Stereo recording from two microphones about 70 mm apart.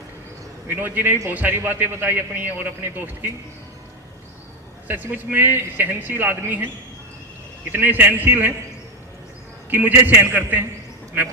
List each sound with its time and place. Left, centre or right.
0.7 s a man's voice: right
4.9 s a man's voice: right
7.7 s a man's voice: right
9.6 s a man's voice: right